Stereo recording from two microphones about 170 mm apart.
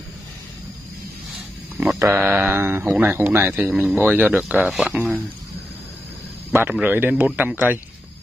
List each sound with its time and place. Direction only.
1.8 s speech: 10° right (ahead or behind)
6.7 s speech: 10° right (ahead or behind)